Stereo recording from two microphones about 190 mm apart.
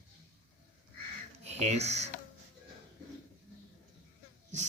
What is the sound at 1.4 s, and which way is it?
Speech, 35° right (ahead or behind).